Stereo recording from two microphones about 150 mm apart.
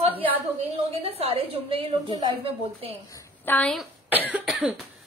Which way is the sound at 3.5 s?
5° left (ahead or behind).